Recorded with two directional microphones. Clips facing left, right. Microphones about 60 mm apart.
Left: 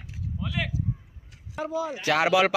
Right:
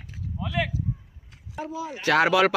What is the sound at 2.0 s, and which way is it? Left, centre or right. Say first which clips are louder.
Speech: right 2 dB; centre.